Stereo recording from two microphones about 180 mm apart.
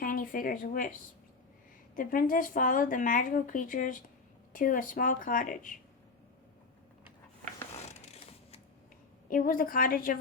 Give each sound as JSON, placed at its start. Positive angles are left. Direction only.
{"t": 0.0, "sound": "speech", "side_deg": 50}
{"t": 2.0, "sound": "speech", "side_deg": 50}
{"t": 8.0, "sound": "printer", "side_deg": 35}
{"t": 9.3, "sound": "speech", "side_deg": 50}